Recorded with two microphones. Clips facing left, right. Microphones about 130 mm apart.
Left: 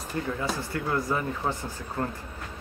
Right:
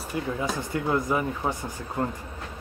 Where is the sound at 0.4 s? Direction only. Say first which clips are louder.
Right 2 dB; 20° right (ahead or behind).